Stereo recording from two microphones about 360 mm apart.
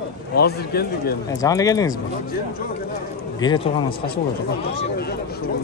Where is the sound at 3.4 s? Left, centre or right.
Centre.